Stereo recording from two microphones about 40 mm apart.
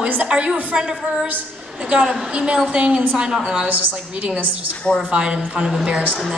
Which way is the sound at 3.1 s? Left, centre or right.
Right.